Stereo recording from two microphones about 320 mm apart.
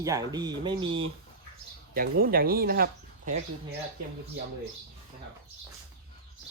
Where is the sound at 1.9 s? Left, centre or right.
Right.